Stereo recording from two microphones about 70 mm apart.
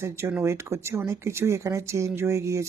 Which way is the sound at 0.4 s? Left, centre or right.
Right.